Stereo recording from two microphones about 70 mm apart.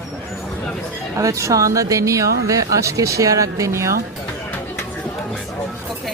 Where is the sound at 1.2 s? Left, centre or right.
Right.